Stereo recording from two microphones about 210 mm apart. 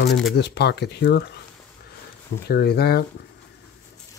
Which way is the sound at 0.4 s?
55° left (ahead or behind).